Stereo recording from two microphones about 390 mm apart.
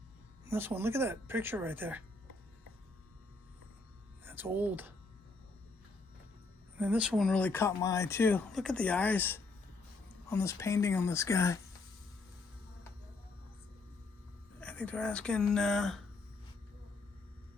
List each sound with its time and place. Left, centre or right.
0.4 s speech: centre
4.3 s speech: centre
6.7 s speech: centre
14.6 s speech: centre